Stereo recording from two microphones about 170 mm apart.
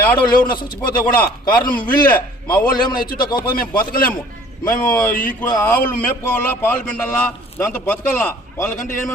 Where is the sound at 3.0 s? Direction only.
60° left (ahead or behind).